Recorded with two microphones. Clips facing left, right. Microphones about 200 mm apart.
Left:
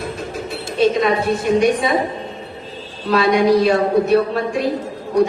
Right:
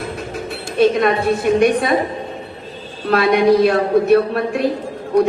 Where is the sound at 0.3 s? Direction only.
60° right (ahead or behind).